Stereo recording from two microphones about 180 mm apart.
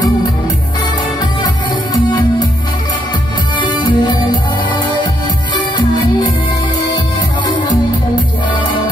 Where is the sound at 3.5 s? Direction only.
25° left (ahead or behind).